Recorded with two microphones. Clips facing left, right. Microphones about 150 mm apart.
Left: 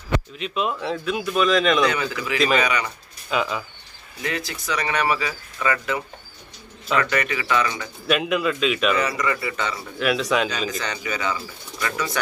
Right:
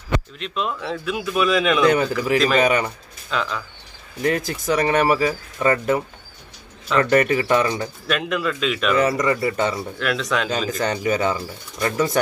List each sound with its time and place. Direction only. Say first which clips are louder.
0.4 s a man's voice: left 1 dB; 5° left (ahead or behind)
1.9 s speech: right 7 dB; 50° right (ahead or behind)
2.3 s a man's voice: right 2 dB; 5° left (ahead or behind)
2.6 s speech: right 5 dB; 45° right (ahead or behind)
3.3 s speech: left 1 dB; 10° left (ahead or behind)
4.2 s speech: right 7 dB; 45° right (ahead or behind)
8.1 s a man's voice: left 2 dB; 5° left (ahead or behind)
8.9 s speech: right 5 dB; 45° right (ahead or behind)
9.9 s a man's voice: left 2 dB; 5° left (ahead or behind)
10.7 s speech: right 7 dB; 50° right (ahead or behind)